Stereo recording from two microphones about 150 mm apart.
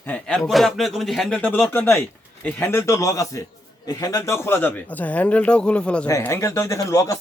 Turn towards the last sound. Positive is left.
turn(degrees=20)  # may be behind; listen again after turning